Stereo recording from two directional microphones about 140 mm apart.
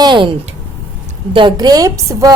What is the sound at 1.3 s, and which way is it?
Speech, 30° right (ahead or behind).